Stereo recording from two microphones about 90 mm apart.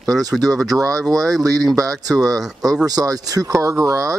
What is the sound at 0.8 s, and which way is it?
Speech, 40° right (ahead or behind).